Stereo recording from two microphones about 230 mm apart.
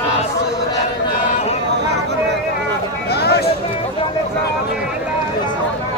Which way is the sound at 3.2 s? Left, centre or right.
Left.